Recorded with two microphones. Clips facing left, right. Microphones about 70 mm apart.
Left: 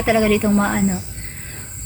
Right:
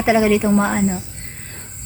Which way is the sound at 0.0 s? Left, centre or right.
Centre.